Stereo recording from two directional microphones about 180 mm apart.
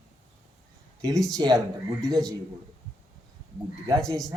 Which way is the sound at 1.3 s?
20° right (ahead or behind).